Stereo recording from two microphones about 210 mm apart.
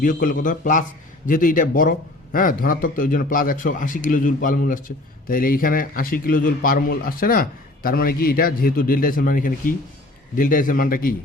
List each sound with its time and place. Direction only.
0.0 s speech: 40° left (ahead or behind)